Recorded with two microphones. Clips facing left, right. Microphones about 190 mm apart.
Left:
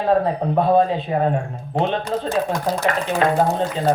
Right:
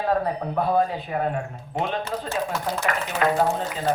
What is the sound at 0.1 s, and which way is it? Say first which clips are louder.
A man's voice: left 9 dB; 25° left (ahead or behind).